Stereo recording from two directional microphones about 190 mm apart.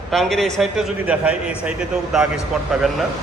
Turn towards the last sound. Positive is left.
turn(degrees=0)  # may be behind; listen again after turning